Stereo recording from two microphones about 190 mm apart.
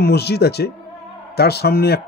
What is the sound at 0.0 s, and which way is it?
Speech, 60° left (ahead or behind).